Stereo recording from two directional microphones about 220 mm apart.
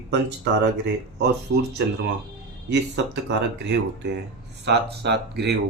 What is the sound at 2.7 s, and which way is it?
Speech, 50° right (ahead or behind).